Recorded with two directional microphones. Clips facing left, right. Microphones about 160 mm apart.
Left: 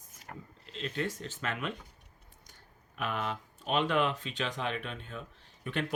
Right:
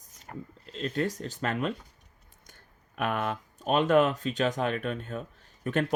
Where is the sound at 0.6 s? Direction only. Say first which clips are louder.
Right 5 dB; 40° right (ahead or behind).